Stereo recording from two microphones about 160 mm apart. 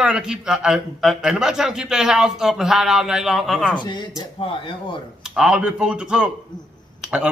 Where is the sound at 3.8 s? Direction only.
30° left (ahead or behind).